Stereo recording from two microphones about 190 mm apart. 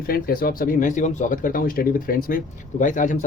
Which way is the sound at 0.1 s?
50° left (ahead or behind).